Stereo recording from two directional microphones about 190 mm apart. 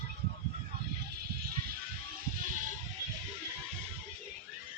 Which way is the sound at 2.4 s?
45° right (ahead or behind).